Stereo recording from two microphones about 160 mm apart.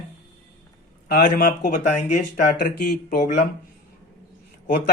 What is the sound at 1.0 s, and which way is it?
Speech, 60° left (ahead or behind).